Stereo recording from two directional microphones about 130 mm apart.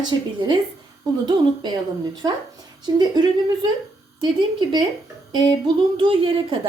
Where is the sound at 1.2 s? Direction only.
35° right (ahead or behind).